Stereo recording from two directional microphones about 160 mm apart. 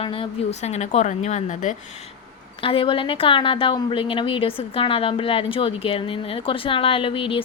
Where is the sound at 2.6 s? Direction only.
35° left (ahead or behind).